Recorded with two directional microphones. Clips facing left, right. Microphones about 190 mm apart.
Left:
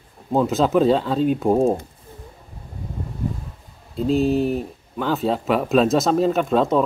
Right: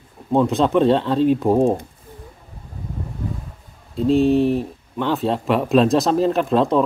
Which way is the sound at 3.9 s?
Centre (ahead or behind).